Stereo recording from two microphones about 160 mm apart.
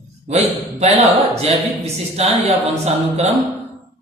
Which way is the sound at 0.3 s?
40° right (ahead or behind).